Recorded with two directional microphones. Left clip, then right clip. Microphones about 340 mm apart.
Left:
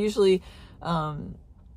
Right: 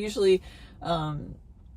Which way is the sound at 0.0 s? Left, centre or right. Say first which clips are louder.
Left 2 dB; centre.